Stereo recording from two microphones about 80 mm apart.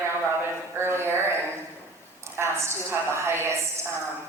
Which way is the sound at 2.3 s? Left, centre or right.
Right.